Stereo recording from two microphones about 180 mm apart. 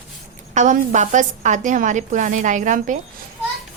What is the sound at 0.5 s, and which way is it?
A woman's voice, 40° right (ahead or behind).